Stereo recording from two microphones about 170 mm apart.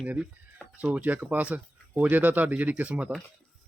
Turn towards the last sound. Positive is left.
turn(degrees=-5)  # may be behind; listen again after turning